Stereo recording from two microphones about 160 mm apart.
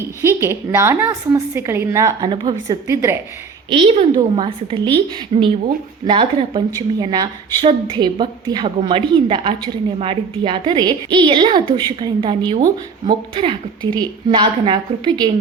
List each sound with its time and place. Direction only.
0.0 s a woman's voice: 15° right (ahead or behind)
2.3 s a woman's voice: 30° right (ahead or behind)
3.7 s a woman's voice: 30° right (ahead or behind)